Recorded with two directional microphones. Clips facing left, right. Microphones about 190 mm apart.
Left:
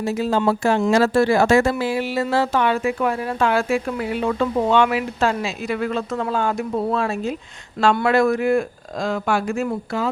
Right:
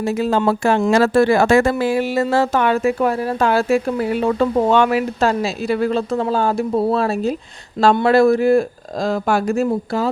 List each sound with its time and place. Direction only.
0.0 s speech: 60° right (ahead or behind); by 9.6 s 40° right (ahead or behind)